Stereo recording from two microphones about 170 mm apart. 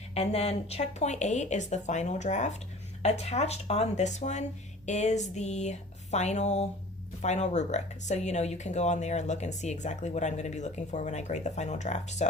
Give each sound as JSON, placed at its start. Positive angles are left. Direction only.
{"t": 0.1, "sound": "speech", "side_deg": 40}